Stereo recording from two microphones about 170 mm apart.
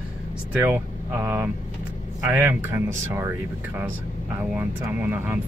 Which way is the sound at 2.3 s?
10° right (ahead or behind).